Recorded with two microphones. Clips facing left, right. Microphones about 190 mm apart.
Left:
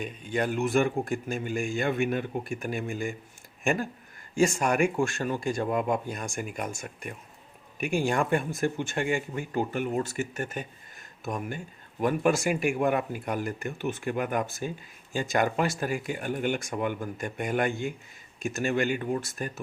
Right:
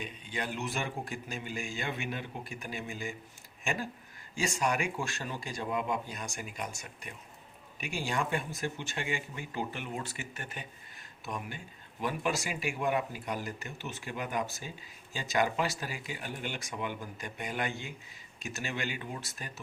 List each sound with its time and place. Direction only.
0.0 s speech: 50° left (ahead or behind)